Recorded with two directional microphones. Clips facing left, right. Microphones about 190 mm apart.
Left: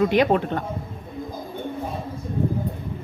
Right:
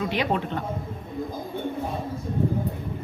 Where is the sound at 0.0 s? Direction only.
50° left (ahead or behind).